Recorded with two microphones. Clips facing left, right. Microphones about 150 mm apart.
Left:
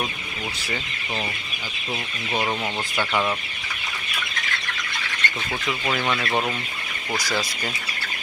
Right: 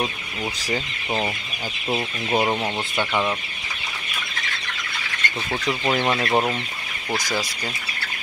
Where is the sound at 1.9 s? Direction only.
30° right (ahead or behind); by 3.3 s 10° right (ahead or behind).